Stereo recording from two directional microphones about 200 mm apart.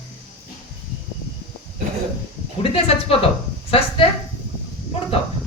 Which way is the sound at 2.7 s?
30° left (ahead or behind).